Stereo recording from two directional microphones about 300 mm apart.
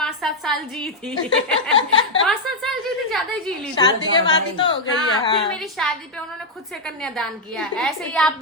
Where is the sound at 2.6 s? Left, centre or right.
Centre.